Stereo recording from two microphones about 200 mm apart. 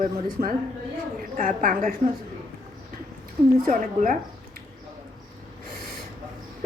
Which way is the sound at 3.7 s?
40° right (ahead or behind).